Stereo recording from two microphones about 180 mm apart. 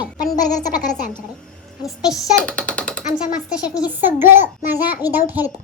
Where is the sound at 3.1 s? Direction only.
5° right (ahead or behind).